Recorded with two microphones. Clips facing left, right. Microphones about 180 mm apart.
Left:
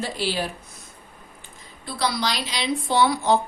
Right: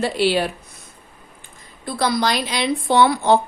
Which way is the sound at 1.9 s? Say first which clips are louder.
Right 5 dB; 50° right (ahead or behind).